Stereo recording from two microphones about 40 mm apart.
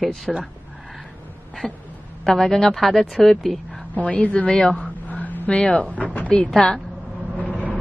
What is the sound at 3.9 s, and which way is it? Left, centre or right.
Speech, left.